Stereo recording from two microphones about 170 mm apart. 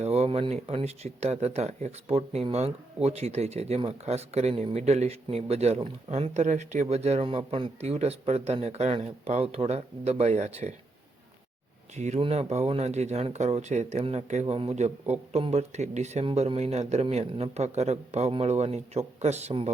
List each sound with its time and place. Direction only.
0.0 s speech: 35° right (ahead or behind)
11.9 s speech: 40° right (ahead or behind)